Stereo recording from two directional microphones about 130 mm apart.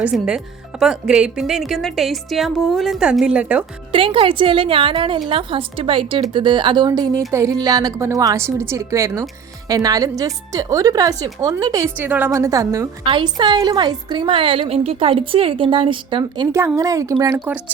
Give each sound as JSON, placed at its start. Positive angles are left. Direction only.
{"t": 0.0, "sound": "speech", "side_deg": -5}
{"t": 3.9, "sound": "a woman's voice", "side_deg": -45}
{"t": 11.9, "sound": "a woman's voice", "side_deg": -15}
{"t": 12.3, "sound": "a woman's voice", "side_deg": -25}
{"t": 13.1, "sound": "a woman's voice", "side_deg": -35}
{"t": 16.5, "sound": "a woman's voice", "side_deg": -20}